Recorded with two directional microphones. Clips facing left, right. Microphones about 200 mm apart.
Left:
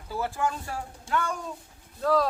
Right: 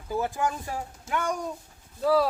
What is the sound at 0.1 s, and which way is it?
Speech, 15° right (ahead or behind).